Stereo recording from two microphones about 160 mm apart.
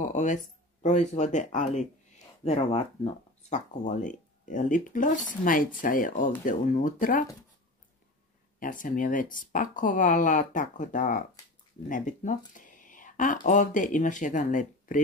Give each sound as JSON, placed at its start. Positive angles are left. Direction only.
{"t": 0.0, "sound": "speech", "side_deg": 50}
{"t": 8.5, "sound": "speech", "side_deg": 55}